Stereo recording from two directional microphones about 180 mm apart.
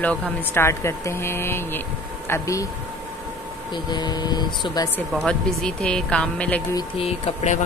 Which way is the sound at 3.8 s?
25° left (ahead or behind).